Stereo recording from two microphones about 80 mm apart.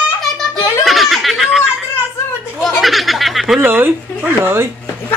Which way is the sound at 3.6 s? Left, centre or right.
Right.